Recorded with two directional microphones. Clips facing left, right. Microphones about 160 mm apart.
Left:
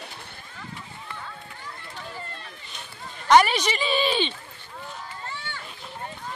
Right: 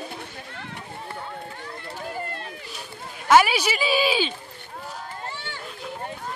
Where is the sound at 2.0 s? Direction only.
60° right (ahead or behind).